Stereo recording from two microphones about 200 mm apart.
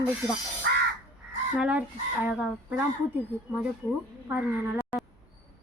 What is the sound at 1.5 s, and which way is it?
Speech, 5° right (ahead or behind).